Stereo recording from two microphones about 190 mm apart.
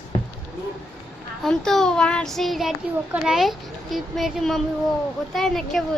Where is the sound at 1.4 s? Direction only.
5° left (ahead or behind).